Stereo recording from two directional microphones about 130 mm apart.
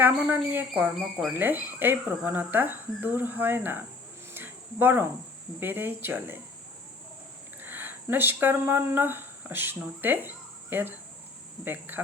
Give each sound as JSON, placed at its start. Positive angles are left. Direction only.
{"t": 0.5, "sound": "speech", "side_deg": -15}
{"t": 4.4, "sound": "cricket", "side_deg": -15}
{"t": 5.5, "sound": "speech", "side_deg": -15}
{"t": 7.6, "sound": "speech", "side_deg": -15}